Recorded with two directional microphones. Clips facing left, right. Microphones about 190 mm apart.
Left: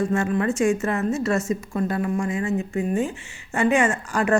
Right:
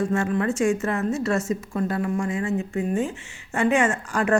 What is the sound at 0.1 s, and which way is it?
Speech, 15° left (ahead or behind).